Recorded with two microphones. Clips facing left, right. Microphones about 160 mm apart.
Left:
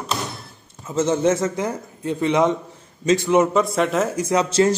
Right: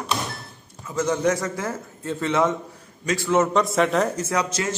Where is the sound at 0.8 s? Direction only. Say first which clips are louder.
Left 3 dB; 25° left (ahead or behind).